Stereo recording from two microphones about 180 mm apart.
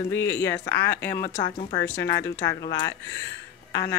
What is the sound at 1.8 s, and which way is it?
Speech, 15° left (ahead or behind).